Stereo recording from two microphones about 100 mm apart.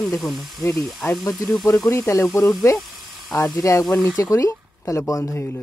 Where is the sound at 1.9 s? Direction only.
30° left (ahead or behind).